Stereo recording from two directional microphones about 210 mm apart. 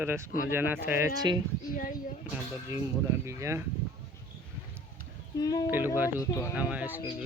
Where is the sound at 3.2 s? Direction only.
15° right (ahead or behind).